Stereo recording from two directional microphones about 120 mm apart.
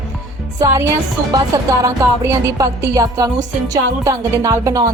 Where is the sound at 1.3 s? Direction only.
30° right (ahead or behind).